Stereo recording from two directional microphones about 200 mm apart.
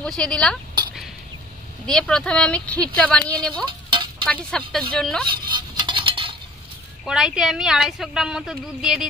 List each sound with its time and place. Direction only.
0.0 s speech: 5° left (ahead or behind)
1.9 s speech: 5° left (ahead or behind)
3.6 s a sound: 25° right (ahead or behind)
4.3 s speech: 5° left (ahead or behind)
5.2 s a sound: 25° right (ahead or behind)
7.1 s speech: 5° right (ahead or behind)